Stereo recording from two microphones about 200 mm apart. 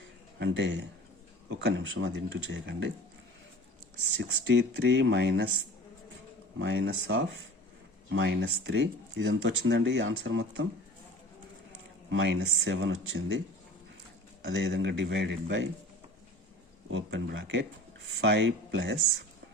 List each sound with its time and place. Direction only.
0.3 s speech: 60° right (ahead or behind)
4.2 s speech: 60° right (ahead or behind)
6.6 s speech: 65° right (ahead or behind)
12.1 s speech: 65° right (ahead or behind)
14.4 s speech: 60° right (ahead or behind)
16.9 s speech: 65° right (ahead or behind)